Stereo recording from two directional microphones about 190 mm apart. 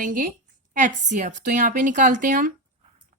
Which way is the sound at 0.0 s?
45° right (ahead or behind).